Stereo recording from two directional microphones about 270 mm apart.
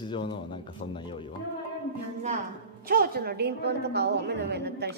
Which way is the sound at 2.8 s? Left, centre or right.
Right.